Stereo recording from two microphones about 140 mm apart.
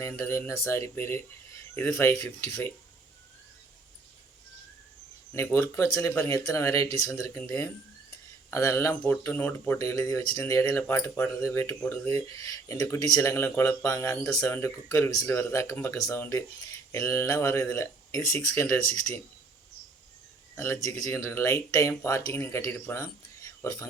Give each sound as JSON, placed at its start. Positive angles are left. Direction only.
{"t": 0.0, "sound": "speech", "side_deg": 15}
{"t": 5.3, "sound": "speech", "side_deg": 15}
{"t": 20.8, "sound": "speech", "side_deg": 20}